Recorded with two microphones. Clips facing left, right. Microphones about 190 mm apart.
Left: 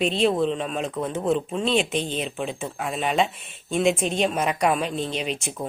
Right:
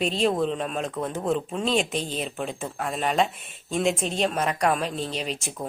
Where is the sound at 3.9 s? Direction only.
35° right (ahead or behind).